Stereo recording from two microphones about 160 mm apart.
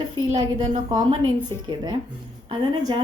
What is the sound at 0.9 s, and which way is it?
A woman's voice, 25° right (ahead or behind).